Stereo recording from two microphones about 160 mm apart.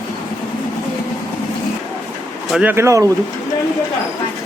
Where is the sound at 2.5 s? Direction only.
10° right (ahead or behind).